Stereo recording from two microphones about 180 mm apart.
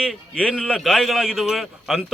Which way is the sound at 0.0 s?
5° left (ahead or behind).